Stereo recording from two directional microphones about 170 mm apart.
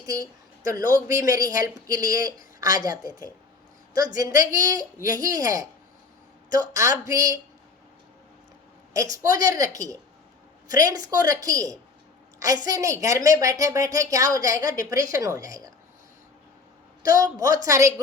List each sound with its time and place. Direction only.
0.0 s speech: 20° right (ahead or behind)
8.9 s speech: 20° right (ahead or behind)
17.0 s speech: 20° right (ahead or behind)